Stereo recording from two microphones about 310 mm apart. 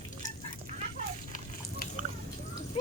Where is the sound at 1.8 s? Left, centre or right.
Left.